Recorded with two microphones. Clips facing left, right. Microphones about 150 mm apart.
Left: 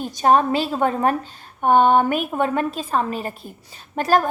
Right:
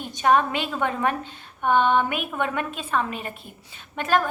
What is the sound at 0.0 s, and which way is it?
A woman's voice, 40° left (ahead or behind).